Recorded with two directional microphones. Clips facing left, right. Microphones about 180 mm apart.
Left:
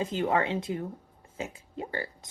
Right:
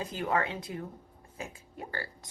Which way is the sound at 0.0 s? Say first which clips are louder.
Left 4 dB; 25° left (ahead or behind).